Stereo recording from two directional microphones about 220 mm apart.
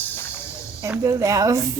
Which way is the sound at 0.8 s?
15° right (ahead or behind).